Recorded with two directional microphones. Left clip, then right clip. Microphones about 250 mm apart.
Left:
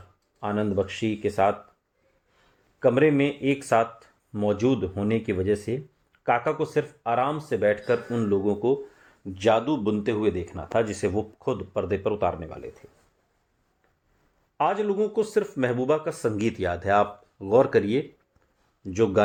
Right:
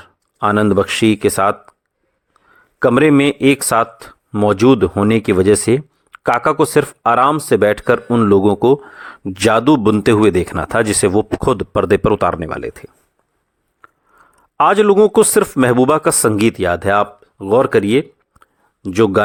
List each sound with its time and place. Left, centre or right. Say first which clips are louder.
0.3 s a man's voice: right 13 dB; right
2.7 s a man's voice: right 9 dB; right
14.6 s a man's voice: right 14 dB; right